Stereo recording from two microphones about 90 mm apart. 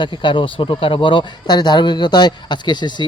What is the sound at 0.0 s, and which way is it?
Speech, 65° left (ahead or behind).